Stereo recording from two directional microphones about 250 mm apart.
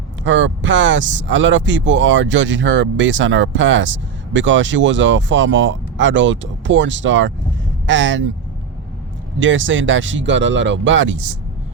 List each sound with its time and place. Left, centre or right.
0.3 s speech: right
9.4 s speech: right